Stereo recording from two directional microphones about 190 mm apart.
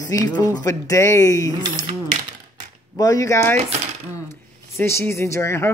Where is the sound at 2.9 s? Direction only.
20° left (ahead or behind).